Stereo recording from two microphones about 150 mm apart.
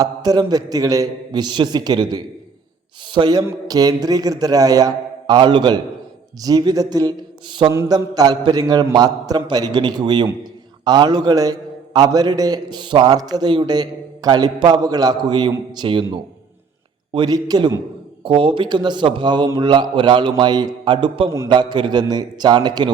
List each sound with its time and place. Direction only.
0.0 s a man's voice: 25° right (ahead or behind)
17.2 s a man's voice: 25° right (ahead or behind)